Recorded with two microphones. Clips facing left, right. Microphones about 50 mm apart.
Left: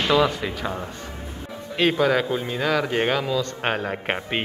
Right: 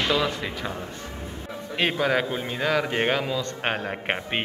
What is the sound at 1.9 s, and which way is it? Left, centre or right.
Speech, centre.